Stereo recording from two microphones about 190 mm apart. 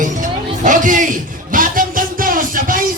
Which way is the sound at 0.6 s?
45° right (ahead or behind).